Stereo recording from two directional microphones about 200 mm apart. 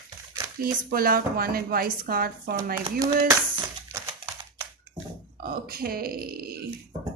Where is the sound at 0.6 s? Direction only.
45° right (ahead or behind).